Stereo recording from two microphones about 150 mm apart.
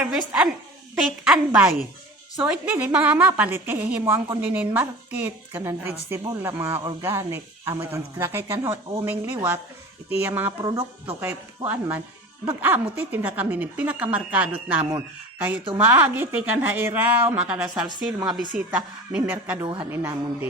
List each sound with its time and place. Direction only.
0.0 s a woman's voice: 5° right (ahead or behind)
10.6 s speech: 30° right (ahead or behind)
11.2 s a woman's voice: 15° right (ahead or behind)
19.5 s speech: 35° right (ahead or behind)
19.9 s a woman's voice: 15° right (ahead or behind)